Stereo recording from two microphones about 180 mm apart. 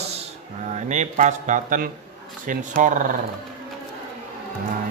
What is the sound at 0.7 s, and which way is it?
A man's voice, 40° right (ahead or behind).